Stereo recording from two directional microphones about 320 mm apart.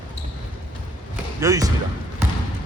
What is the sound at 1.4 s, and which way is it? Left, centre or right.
Speech, centre.